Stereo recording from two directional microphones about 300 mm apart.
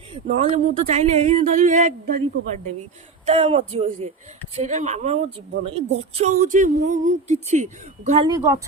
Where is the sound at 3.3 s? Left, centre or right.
Centre.